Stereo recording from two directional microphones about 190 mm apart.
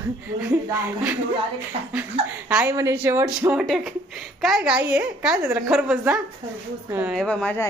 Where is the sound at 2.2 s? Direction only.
30° right (ahead or behind).